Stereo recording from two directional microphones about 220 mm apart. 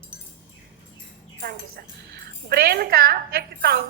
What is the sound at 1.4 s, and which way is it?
Speech, 45° right (ahead or behind).